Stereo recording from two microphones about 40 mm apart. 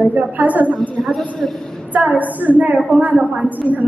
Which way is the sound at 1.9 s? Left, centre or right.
Right.